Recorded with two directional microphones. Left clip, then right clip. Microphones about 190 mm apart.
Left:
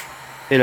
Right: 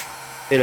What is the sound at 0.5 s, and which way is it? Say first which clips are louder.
Speech: left 2 dB; 50° left (ahead or behind).